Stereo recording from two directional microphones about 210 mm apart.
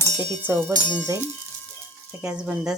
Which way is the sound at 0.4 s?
10° right (ahead or behind).